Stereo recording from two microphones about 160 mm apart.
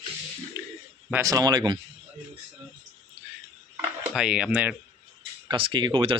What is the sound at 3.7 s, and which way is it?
Speech, 5° right (ahead or behind).